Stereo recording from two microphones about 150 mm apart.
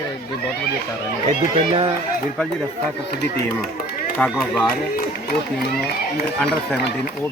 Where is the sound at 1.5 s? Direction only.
35° right (ahead or behind).